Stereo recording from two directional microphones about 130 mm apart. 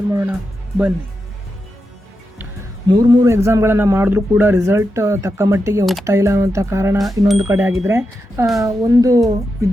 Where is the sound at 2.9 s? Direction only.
35° right (ahead or behind).